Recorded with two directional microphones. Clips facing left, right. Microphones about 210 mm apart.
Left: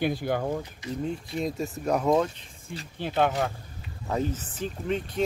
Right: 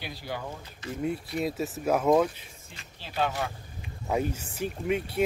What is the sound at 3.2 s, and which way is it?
Speech, 50° left (ahead or behind).